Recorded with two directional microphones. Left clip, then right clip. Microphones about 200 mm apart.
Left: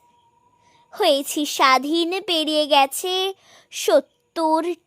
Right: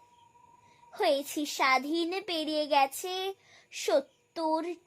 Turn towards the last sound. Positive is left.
turn(degrees=45)  # may be behind; listen again after turning